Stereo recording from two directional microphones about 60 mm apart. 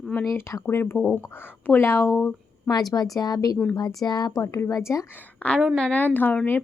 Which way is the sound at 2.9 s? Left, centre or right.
Left.